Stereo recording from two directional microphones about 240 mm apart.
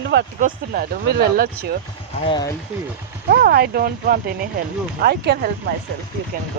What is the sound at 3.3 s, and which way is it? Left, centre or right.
Speech, right.